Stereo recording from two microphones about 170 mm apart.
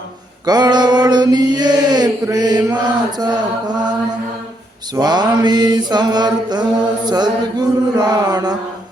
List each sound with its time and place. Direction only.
0.4 s mantra: 25° right (ahead or behind)
4.9 s mantra: 25° right (ahead or behind)